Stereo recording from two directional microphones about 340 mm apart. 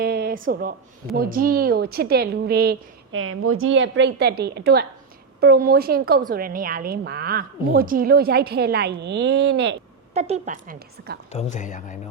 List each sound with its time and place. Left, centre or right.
0.0 s speech: right
10.2 s speech: centre
11.3 s speech: centre